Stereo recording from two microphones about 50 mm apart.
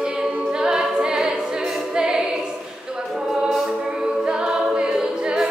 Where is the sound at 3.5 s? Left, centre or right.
Centre.